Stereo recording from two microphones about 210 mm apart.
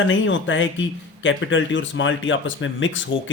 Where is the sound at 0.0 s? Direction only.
65° left (ahead or behind).